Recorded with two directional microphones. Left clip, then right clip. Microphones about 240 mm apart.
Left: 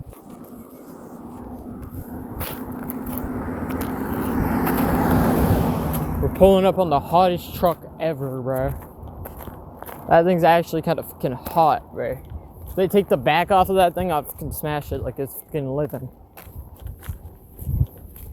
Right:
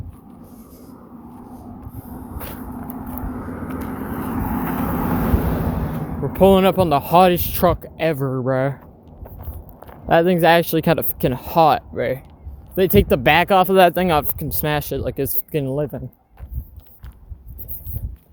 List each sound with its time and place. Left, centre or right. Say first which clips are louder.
1.4 s a sound: left 2 dB; right
2.1 s vehicle: left 1 dB; right
2.4 s vehicle: left 3 dB; left
3.0 s vehicle: left 3 dB; right; by 5.3 s centre
5.5 s a sound: left 2 dB; left
6.3 s speech: right 1 dB; right
10.1 s speech: right 1 dB; right
12.7 s speech: right 3 dB; right